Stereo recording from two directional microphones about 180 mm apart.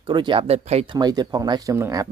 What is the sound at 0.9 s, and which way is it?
Speech, 20° right (ahead or behind).